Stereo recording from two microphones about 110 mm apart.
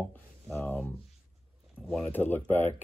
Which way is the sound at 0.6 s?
15° left (ahead or behind).